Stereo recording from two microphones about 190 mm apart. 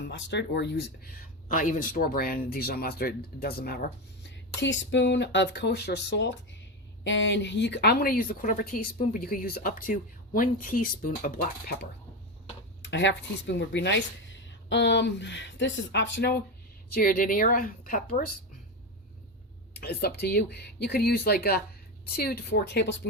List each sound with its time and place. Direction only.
0.1 s a woman's voice: 65° left (ahead or behind); by 11.9 s 50° left (ahead or behind)
12.8 s speech: 70° left (ahead or behind)
16.9 s a woman's voice: 50° left (ahead or behind)
19.7 s speech: 55° left (ahead or behind)